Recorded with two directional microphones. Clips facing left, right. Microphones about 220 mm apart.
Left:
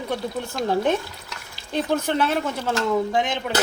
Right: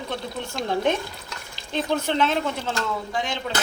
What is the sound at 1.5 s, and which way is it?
Speech, 10° left (ahead or behind).